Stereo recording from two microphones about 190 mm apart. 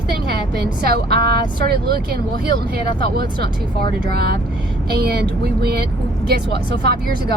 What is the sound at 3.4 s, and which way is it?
Speech, 55° right (ahead or behind).